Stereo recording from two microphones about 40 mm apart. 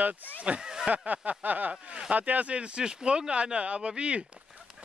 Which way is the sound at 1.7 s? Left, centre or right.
Right.